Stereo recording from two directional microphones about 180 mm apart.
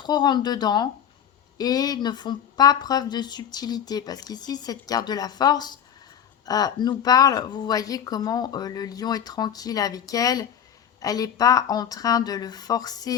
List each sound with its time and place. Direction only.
0.0 s a woman's voice: 25° left (ahead or behind)